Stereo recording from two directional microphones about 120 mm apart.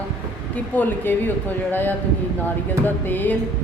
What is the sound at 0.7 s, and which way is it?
Speech, 15° left (ahead or behind).